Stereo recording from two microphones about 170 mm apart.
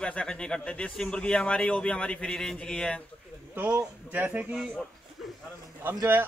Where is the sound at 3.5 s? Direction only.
10° right (ahead or behind).